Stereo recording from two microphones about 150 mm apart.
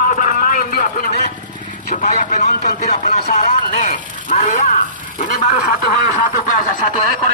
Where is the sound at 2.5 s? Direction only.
80° left.